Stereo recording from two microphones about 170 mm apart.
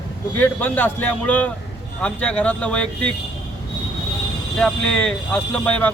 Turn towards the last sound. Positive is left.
turn(degrees=10)  # may be behind; listen again after turning